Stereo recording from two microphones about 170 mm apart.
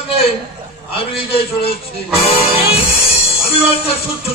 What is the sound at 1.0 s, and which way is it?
A man's voice, 35° left (ahead or behind).